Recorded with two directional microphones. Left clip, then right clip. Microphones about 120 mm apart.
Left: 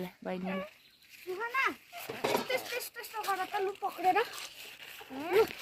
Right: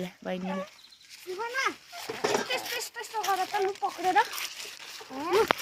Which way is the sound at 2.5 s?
20° left (ahead or behind).